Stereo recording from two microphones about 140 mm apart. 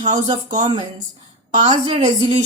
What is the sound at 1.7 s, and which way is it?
Speech, 35° right (ahead or behind).